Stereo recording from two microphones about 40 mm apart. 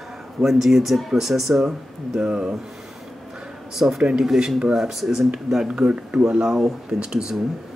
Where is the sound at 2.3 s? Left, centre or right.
Centre.